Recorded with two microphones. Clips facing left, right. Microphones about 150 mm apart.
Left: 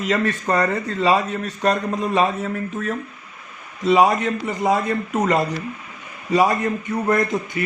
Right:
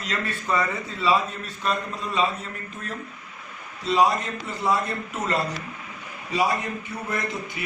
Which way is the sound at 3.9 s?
90° left.